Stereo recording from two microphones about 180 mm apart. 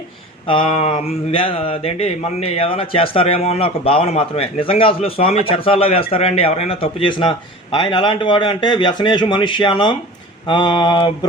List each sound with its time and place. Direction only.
0.4 s speech: 30° left (ahead or behind)